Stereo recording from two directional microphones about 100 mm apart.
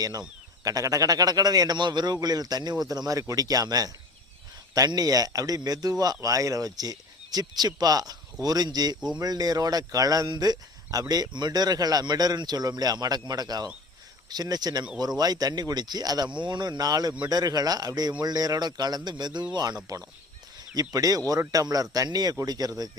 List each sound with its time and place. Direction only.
0.0 s speech: 40° right (ahead or behind)